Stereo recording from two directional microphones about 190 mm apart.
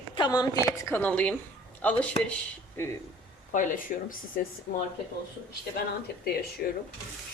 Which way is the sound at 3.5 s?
40° left (ahead or behind).